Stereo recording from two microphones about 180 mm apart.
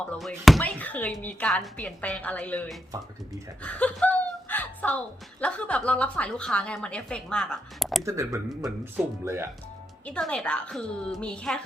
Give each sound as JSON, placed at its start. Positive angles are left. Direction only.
{"t": 0.2, "sound": "speech", "side_deg": 0}
{"t": 3.6, "sound": "a sound", "side_deg": 5}
{"t": 5.4, "sound": "a woman's voice", "side_deg": 5}
{"t": 8.0, "sound": "speech", "side_deg": -15}
{"t": 10.1, "sound": "a woman's voice", "side_deg": 5}